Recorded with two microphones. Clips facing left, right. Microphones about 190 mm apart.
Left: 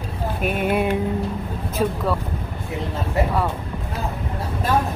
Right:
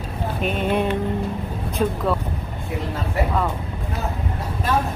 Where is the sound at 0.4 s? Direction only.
10° left (ahead or behind).